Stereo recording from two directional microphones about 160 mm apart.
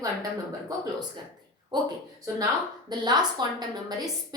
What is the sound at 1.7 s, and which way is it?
A woman's voice, 30° right (ahead or behind).